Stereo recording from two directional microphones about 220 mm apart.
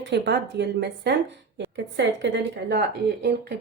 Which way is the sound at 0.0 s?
50° right (ahead or behind).